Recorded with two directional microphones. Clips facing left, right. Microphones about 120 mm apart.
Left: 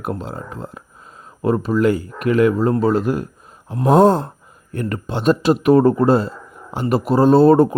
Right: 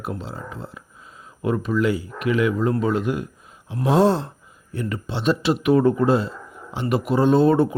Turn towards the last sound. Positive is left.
turn(degrees=40)  # may be behind; listen again after turning